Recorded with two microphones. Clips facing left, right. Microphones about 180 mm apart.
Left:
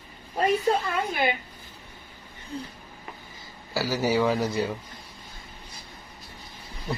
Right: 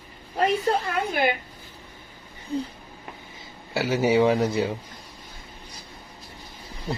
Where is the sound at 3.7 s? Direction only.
25° right (ahead or behind).